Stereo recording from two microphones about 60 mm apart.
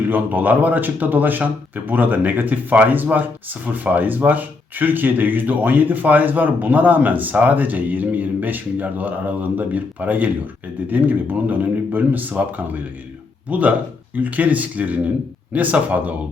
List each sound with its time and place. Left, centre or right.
0.1 s speech: right